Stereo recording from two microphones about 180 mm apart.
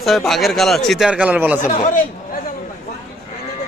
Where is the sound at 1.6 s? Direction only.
45° left (ahead or behind).